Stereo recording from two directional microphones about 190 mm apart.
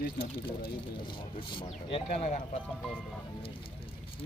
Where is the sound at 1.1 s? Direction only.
25° left (ahead or behind).